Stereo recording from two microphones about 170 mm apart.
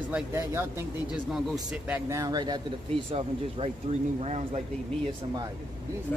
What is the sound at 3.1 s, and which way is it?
Speech, 35° right (ahead or behind).